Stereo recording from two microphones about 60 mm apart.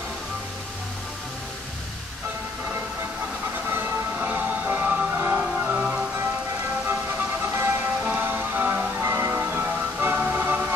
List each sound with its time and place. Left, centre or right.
3.6 s music: right
6.9 s music: right
8.0 s music: right